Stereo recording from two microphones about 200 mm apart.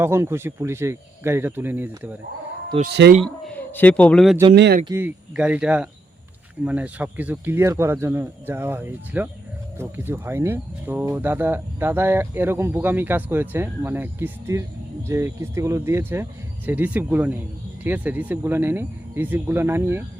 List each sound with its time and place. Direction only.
0.0 s speech: 10° right (ahead or behind)
2.8 s speech: 60° right (ahead or behind)
3.4 s speech: 10° left (ahead or behind)
4.5 s speech: 55° right (ahead or behind)
4.9 s speech: 10° right (ahead or behind)